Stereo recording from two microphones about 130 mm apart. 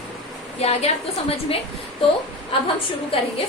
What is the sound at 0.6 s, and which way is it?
Speech, 55° left (ahead or behind).